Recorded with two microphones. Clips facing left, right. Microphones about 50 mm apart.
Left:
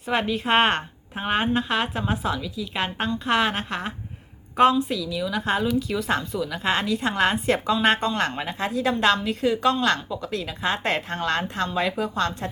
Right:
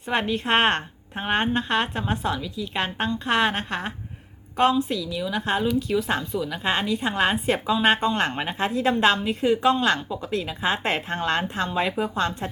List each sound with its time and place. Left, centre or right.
0.1 s a woman's voice: centre
8.3 s a woman's voice: right